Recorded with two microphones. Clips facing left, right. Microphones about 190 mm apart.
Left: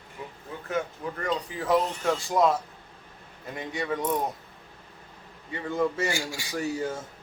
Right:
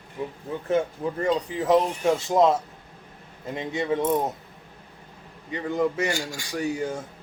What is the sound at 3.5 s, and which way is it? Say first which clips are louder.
Speech: right 5 dB; 25° right (ahead or behind).